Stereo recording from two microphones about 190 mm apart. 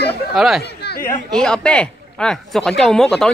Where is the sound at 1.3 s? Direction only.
5° left (ahead or behind).